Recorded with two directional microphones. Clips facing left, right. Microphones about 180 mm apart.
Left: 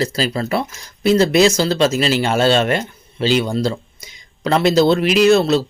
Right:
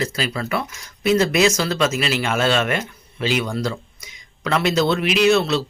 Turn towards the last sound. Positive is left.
turn(degrees=40)  # may be behind; listen again after turning